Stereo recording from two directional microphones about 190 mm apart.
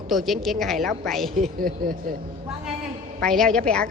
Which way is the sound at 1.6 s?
50° right (ahead or behind).